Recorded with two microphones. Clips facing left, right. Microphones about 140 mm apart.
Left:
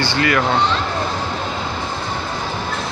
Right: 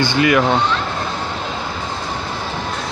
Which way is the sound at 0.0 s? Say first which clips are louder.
Right 3 dB; 15° right (ahead or behind).